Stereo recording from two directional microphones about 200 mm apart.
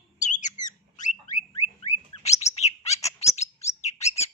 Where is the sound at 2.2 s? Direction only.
35° left (ahead or behind).